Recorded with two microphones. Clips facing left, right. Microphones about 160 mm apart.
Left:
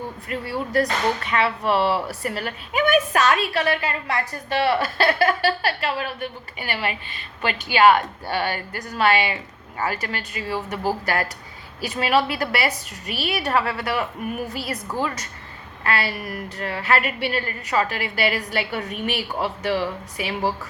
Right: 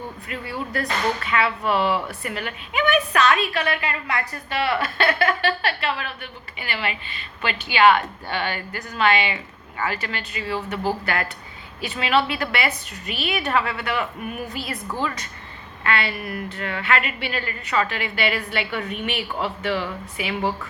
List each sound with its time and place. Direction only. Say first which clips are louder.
0.3 s speech: left 4 dB; 35° left (ahead or behind)